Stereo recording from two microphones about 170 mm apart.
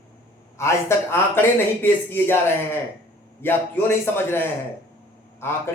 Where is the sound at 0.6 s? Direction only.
15° left (ahead or behind).